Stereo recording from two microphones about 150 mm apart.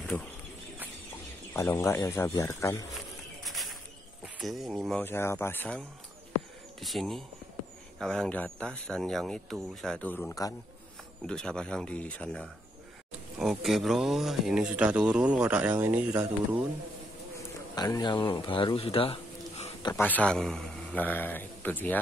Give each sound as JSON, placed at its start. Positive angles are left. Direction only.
{"t": 1.5, "sound": "a man's voice", "side_deg": 20}
{"t": 3.4, "sound": "a sound", "side_deg": 0}
{"t": 4.4, "sound": "speech", "side_deg": 0}
{"t": 5.0, "sound": "a man's voice", "side_deg": 15}
{"t": 6.8, "sound": "a man's voice", "side_deg": 0}
{"t": 17.7, "sound": "speech", "side_deg": 25}
{"t": 20.0, "sound": "a man's voice", "side_deg": 10}